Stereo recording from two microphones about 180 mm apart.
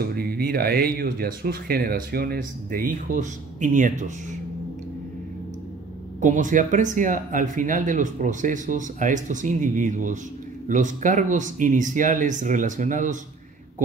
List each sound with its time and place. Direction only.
0.0 s speech: 55° right (ahead or behind)
6.2 s speech: 45° right (ahead or behind)